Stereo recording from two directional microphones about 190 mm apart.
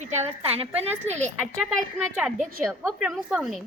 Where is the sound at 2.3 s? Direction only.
40° right (ahead or behind).